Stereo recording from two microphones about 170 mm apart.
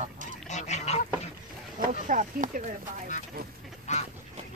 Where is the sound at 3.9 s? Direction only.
45° left (ahead or behind).